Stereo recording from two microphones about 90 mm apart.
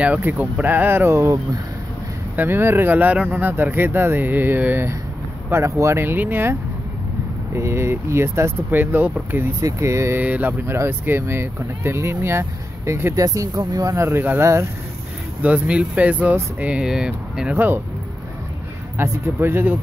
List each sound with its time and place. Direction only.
0.0 s speech: 20° right (ahead or behind)
2.3 s speech: 25° right (ahead or behind)
5.5 s speech: 35° right (ahead or behind)
9.6 s speech: 35° right (ahead or behind)
10.2 s speech: 20° right (ahead or behind)
15.4 s speech: 15° right (ahead or behind)
17.6 s speech: 25° right (ahead or behind)
18.9 s speech: 25° right (ahead or behind)